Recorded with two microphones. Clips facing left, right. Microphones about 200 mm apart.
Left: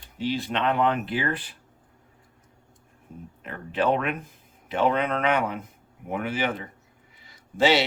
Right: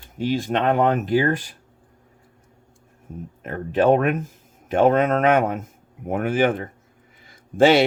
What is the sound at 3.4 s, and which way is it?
Speech, 45° right (ahead or behind).